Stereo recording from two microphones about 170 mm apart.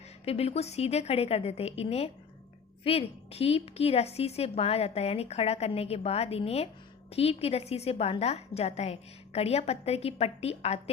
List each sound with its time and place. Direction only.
0.3 s a woman's voice: 35° left (ahead or behind)